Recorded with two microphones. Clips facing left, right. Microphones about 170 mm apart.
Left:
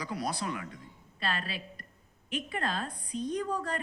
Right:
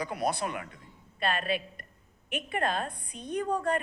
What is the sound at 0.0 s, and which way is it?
A woman's voice, 55° right (ahead or behind).